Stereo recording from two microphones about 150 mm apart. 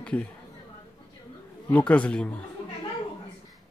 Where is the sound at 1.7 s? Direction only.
10° left (ahead or behind).